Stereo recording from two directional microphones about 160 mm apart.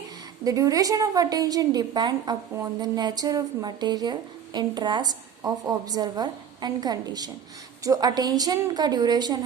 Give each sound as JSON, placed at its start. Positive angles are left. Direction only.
{"t": 0.4, "sound": "a woman's voice", "side_deg": -20}